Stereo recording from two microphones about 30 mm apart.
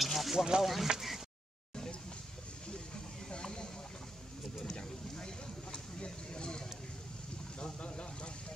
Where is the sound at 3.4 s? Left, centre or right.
Left.